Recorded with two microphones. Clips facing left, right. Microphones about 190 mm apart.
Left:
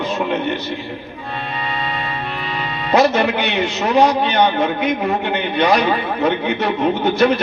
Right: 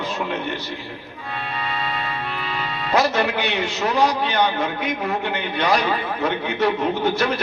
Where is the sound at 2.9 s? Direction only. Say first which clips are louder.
Left 5 dB; 20° left (ahead or behind).